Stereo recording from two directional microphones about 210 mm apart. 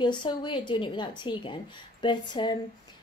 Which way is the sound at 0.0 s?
20° left (ahead or behind).